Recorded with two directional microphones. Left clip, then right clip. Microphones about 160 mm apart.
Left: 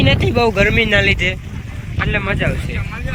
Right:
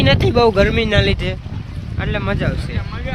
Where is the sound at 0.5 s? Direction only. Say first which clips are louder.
Left 2 dB; 20° right (ahead or behind).